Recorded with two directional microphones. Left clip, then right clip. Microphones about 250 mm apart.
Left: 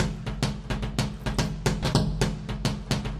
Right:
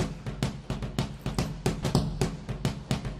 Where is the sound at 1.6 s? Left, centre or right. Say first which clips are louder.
Left 3 dB; centre.